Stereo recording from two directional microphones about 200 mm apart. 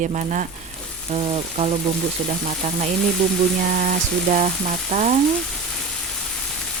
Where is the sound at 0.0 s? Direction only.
40° right (ahead or behind).